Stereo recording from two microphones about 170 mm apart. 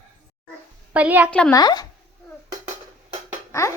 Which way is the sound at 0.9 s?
10° right (ahead or behind).